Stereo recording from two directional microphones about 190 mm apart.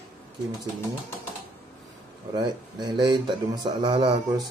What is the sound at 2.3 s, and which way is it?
Speech, 20° right (ahead or behind).